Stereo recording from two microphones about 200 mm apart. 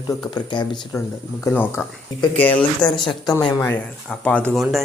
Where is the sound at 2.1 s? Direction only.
20° left (ahead or behind).